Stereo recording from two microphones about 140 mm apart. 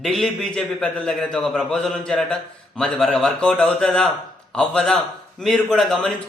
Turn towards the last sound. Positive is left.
turn(degrees=5)  # may be behind; listen again after turning